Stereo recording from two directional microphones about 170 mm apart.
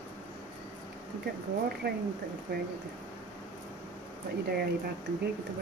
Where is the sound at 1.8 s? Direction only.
70° right (ahead or behind).